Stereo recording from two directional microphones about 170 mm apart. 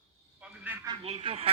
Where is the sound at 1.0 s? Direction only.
35° right (ahead or behind).